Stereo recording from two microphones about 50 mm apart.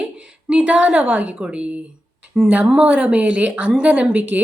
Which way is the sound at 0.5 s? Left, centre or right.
Right.